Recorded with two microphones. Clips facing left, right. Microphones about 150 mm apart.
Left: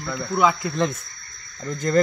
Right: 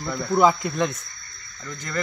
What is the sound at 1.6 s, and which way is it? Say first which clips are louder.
Speech: left 10 dB; 40° left (ahead or behind).